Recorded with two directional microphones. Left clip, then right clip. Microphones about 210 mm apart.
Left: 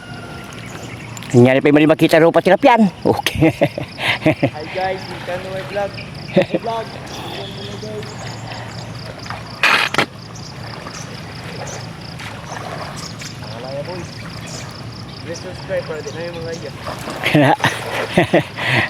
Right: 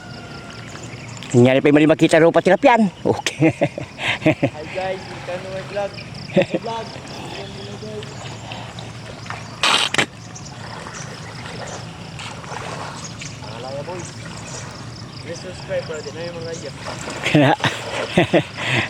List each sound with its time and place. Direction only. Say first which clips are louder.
1.3 s speech: left 2 dB; centre (ahead or behind)
4.8 s speech: left 4 dB; 15° left (ahead or behind)
6.3 s speech: left 2 dB; 5° left (ahead or behind)
9.6 s a sound: left 3 dB; 5° right (ahead or behind)
15.3 s speech: left 2 dB; centre (ahead or behind)